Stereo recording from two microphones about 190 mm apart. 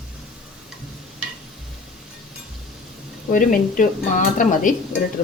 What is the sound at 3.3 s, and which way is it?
Speech, 45° left (ahead or behind).